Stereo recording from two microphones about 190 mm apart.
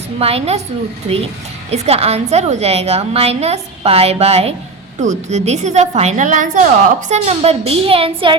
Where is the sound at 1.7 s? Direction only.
35° right (ahead or behind).